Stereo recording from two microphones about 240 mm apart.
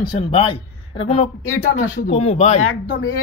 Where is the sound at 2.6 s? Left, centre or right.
Left.